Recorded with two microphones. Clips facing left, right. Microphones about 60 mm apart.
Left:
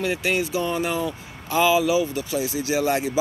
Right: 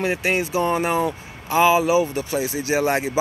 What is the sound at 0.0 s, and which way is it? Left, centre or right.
Speech, right.